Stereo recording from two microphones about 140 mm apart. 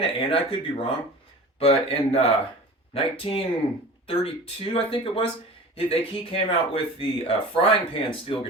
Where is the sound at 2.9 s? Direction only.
40° left (ahead or behind).